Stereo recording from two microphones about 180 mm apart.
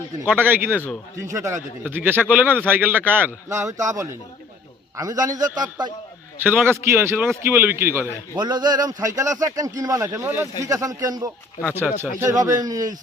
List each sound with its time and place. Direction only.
0.3 s a man's voice: 10° right (ahead or behind)
8.4 s a man's voice: 25° right (ahead or behind)